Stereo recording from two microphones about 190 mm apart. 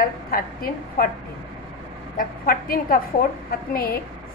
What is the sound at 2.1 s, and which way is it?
A woman's voice, 50° left (ahead or behind).